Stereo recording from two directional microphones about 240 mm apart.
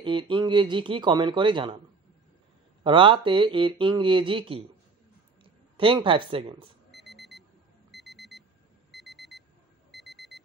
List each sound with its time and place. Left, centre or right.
0.0 s speech: centre
2.8 s speech: right
6.9 s alarm clock: centre